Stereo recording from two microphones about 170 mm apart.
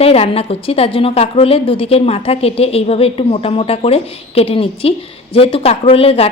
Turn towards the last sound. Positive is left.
turn(degrees=35)  # may be behind; listen again after turning